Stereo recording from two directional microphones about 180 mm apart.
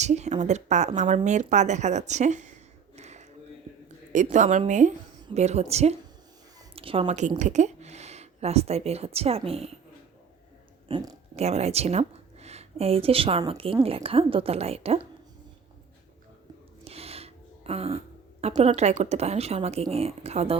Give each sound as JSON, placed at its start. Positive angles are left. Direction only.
{"t": 0.0, "sound": "a woman's voice", "side_deg": -40}
{"t": 2.9, "sound": "a sound", "side_deg": -40}
{"t": 4.1, "sound": "a woman's voice", "side_deg": -45}
{"t": 10.8, "sound": "speech", "side_deg": -20}
{"t": 11.3, "sound": "a woman's voice", "side_deg": -35}
{"t": 16.8, "sound": "speech", "side_deg": -35}